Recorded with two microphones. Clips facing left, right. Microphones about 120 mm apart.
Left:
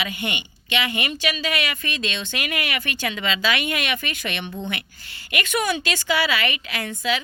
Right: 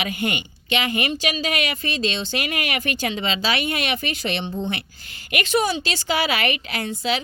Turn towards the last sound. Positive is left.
turn(degrees=-35)  # may be behind; listen again after turning